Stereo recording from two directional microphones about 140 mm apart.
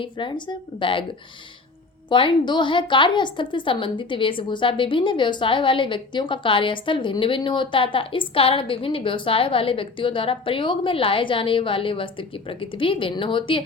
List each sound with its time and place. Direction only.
0.0 s a woman's voice: 35° left (ahead or behind)
2.0 s a woman's voice: 35° left (ahead or behind)